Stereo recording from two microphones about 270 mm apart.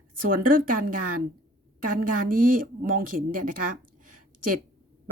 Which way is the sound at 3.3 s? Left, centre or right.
Right.